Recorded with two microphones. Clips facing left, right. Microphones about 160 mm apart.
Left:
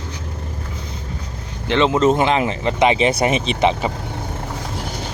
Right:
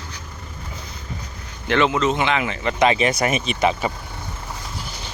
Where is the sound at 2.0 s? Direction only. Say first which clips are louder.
Left 5 dB; 45° left (ahead or behind); by 3.9 s 25° left (ahead or behind).